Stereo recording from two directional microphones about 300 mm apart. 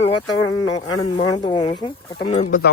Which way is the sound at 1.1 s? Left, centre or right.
Centre.